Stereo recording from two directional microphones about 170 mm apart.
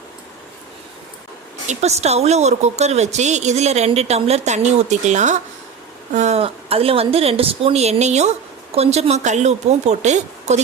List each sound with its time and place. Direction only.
1.6 s speech: 40° right (ahead or behind)